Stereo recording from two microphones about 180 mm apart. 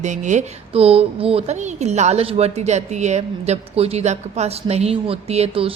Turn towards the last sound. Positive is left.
turn(degrees=-35)  # may be behind; listen again after turning